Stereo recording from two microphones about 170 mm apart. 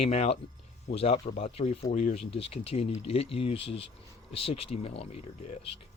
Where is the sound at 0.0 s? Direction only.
35° left (ahead or behind).